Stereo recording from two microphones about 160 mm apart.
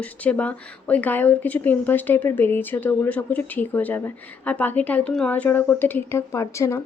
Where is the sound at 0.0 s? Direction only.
10° left (ahead or behind).